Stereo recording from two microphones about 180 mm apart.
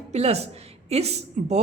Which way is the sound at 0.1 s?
35° right (ahead or behind).